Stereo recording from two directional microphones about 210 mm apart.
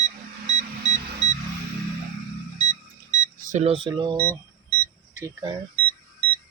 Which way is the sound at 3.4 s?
35° right (ahead or behind).